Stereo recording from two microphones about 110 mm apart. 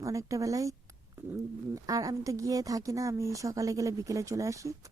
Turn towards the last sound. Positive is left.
turn(degrees=-30)  # may be behind; listen again after turning